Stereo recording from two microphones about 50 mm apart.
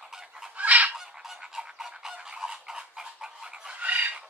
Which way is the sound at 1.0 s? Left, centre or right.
Centre.